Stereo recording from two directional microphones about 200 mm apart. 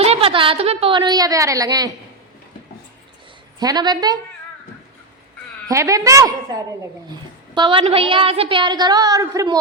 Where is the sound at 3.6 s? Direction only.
20° right (ahead or behind).